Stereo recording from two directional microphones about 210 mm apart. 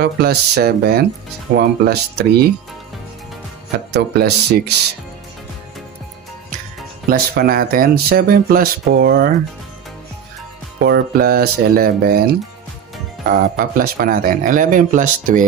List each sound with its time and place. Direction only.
0.0 s speech: 50° right (ahead or behind)
3.9 s speech: 50° right (ahead or behind)
7.1 s speech: 45° right (ahead or behind)
10.8 s speech: 50° right (ahead or behind)
13.3 s speech: 45° right (ahead or behind)